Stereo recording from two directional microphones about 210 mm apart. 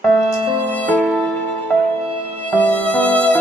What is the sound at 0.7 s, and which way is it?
Music, 5° left (ahead or behind).